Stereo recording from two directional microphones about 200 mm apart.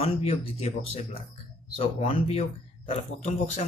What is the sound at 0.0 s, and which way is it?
Speech, 30° left (ahead or behind).